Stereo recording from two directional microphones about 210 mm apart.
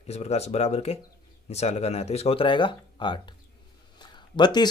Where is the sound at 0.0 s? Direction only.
30° left (ahead or behind).